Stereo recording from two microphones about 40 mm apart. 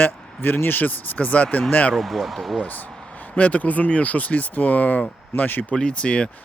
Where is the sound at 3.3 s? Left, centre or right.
Left.